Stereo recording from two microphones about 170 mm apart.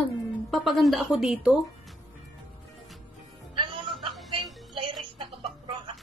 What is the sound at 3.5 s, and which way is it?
Music, 30° right (ahead or behind).